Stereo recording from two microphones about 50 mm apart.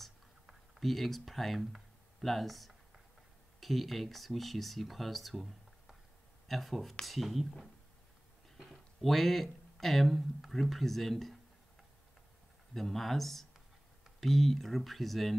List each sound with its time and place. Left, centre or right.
0.7 s speech: centre
8.6 s speech: centre
12.7 s speech: centre